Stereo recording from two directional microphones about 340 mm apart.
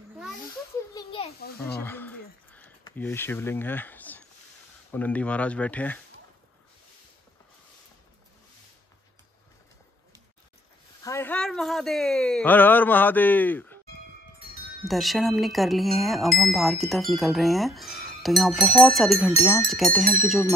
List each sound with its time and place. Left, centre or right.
0.9 s a sound: centre
4.9 s speech: centre
11.1 s speech: centre
14.9 s speech: centre